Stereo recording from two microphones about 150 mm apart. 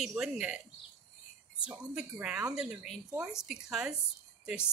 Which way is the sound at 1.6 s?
10° right (ahead or behind).